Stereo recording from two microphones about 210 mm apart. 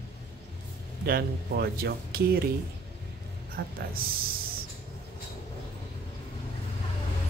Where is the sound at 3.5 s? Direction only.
45° right (ahead or behind).